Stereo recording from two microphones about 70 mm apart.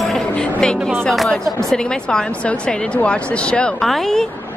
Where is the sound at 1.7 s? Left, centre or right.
Centre.